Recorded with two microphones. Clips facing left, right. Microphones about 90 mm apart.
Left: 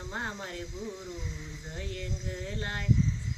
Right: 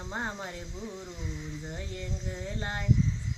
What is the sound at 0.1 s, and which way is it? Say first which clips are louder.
Speech: right 2 dB; 15° right (ahead or behind).